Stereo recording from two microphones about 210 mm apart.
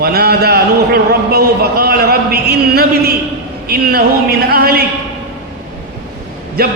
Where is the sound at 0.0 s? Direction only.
45° right (ahead or behind).